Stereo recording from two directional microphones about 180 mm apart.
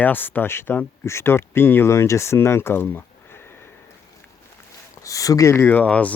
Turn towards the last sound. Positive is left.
turn(degrees=5)  # may be behind; listen again after turning